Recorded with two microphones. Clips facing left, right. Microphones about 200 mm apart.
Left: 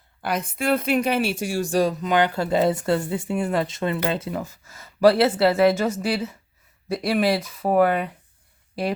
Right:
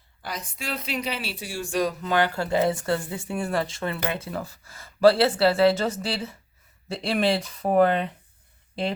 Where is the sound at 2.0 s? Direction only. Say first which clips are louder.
Left 3 dB; 15° left (ahead or behind).